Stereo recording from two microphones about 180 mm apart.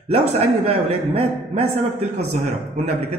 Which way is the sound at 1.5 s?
35° right (ahead or behind).